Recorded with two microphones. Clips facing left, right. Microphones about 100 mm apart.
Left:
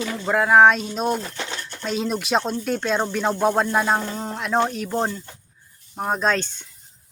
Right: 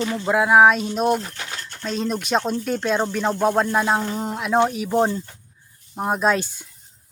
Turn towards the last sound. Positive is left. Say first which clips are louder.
# right 2 dB
turn(degrees=-10)  # may be behind; listen again after turning